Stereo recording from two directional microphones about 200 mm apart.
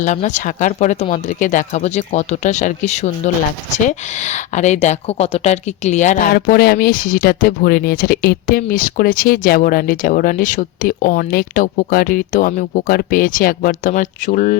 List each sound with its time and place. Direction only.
0.0 s speech: 35° left (ahead or behind)